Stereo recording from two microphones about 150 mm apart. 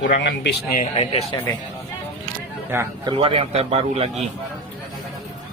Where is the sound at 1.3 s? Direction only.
30° left (ahead or behind).